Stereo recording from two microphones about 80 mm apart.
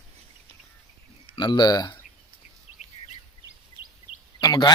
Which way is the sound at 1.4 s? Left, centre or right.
Left.